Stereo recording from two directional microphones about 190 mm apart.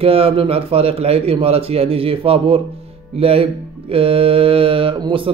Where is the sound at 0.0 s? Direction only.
30° right (ahead or behind).